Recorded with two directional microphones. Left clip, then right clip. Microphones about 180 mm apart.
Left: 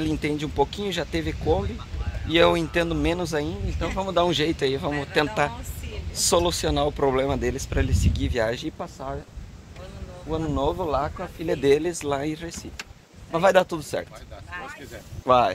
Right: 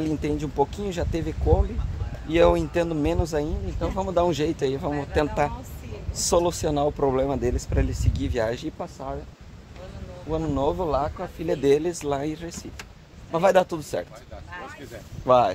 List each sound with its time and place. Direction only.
0.0 s speech: 15° left (ahead or behind)
10.3 s speech: 10° left (ahead or behind)
15.2 s speech: 20° left (ahead or behind)